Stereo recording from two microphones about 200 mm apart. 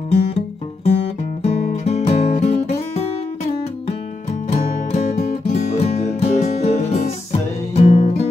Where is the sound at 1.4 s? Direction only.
30° left (ahead or behind).